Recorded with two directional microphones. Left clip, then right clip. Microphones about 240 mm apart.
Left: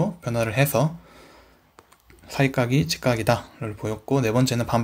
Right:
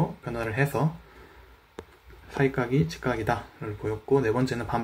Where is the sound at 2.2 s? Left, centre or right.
Left.